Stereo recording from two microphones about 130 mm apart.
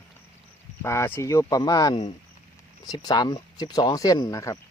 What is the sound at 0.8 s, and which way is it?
Speech, 20° left (ahead or behind).